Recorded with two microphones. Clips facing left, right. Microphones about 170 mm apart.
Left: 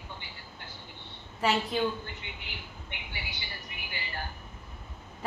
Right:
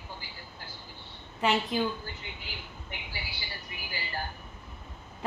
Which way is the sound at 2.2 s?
40° right (ahead or behind).